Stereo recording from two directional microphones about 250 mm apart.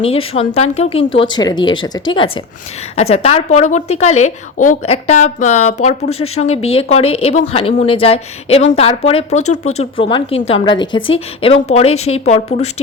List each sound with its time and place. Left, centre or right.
0.0 s a woman's voice: left
6.1 s speech: left
6.3 s a woman's voice: left